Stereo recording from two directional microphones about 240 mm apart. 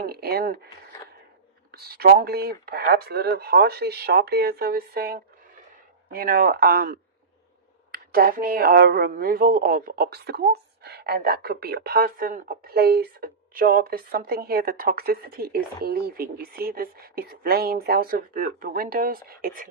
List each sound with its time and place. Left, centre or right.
0.0 s speech: right
1.7 s speech: right